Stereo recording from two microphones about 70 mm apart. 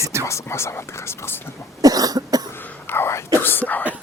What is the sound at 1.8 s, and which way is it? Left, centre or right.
Cough, right.